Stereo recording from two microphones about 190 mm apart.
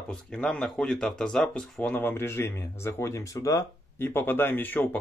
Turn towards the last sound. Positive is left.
turn(degrees=10)  # may be behind; listen again after turning